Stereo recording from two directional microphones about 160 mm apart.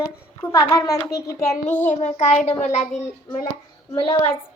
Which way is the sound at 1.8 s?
50° left (ahead or behind).